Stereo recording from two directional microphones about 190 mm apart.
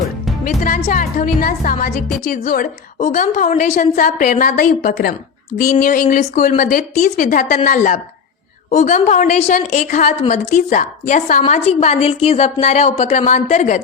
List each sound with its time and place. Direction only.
0.4 s a woman's voice: 45° left (ahead or behind)